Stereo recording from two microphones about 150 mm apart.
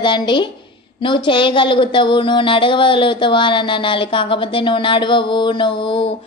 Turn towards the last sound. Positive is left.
turn(degrees=35)  # may be behind; listen again after turning